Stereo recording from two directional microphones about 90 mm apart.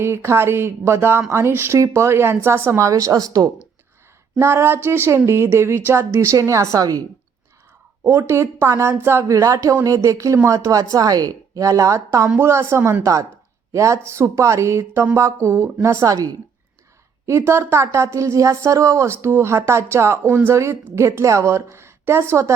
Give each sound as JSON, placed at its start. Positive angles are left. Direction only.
{"t": 0.0, "sound": "a woman's voice", "side_deg": -30}
{"t": 4.4, "sound": "speech", "side_deg": -30}
{"t": 8.0, "sound": "a woman's voice", "side_deg": -30}
{"t": 17.2, "sound": "speech", "side_deg": -30}